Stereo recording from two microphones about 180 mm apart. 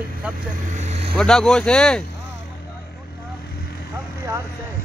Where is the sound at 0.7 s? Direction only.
35° right (ahead or behind).